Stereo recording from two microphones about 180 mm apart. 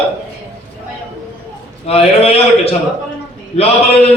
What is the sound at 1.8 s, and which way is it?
A man's voice, 35° left (ahead or behind).